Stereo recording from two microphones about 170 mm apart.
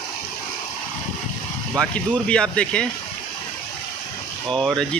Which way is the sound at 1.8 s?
5° left (ahead or behind).